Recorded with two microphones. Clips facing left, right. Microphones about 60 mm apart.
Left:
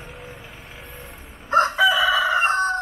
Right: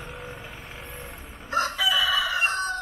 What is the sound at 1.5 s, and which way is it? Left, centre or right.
Chicken, left.